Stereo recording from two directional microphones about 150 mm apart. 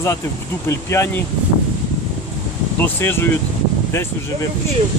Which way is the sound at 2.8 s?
15° left (ahead or behind).